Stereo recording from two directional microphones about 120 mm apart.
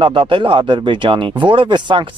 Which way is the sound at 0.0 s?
45° right (ahead or behind).